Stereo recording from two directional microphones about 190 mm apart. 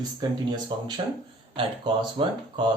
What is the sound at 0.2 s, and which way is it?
Speech, 20° right (ahead or behind).